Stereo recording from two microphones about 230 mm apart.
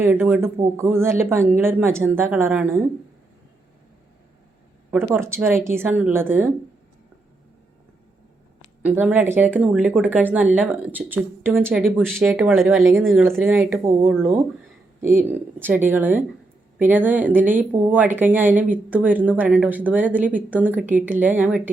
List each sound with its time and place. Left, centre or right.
0.0 s speech: centre
4.9 s speech: centre
8.8 s speech: centre